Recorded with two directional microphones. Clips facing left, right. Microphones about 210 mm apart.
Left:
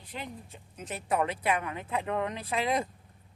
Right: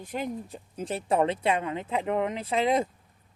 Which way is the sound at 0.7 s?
30° right (ahead or behind).